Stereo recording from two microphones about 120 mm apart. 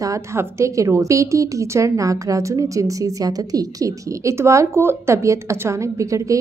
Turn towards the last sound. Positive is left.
turn(degrees=-25)  # may be behind; listen again after turning